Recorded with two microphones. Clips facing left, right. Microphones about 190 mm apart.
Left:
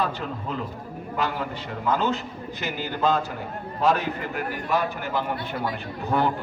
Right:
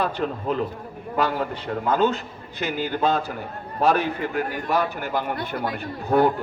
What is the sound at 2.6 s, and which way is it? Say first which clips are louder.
Speech: right 4 dB; 50° right (ahead or behind).